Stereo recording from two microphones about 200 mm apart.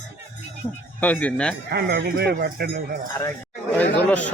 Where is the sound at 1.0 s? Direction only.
5° left (ahead or behind).